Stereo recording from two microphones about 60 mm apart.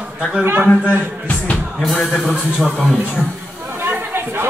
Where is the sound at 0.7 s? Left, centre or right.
Left.